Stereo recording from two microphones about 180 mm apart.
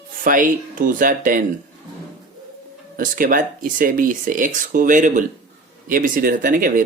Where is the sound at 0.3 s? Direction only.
50° right (ahead or behind).